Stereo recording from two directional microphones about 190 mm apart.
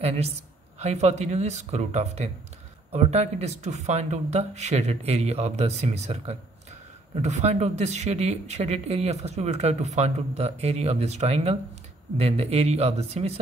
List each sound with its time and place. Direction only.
0.7 s speech: 35° right (ahead or behind)